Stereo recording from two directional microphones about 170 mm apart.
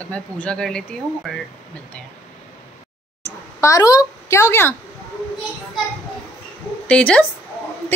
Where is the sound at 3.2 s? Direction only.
20° left (ahead or behind).